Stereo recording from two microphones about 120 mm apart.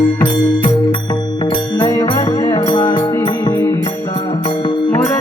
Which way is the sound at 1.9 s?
30° left (ahead or behind).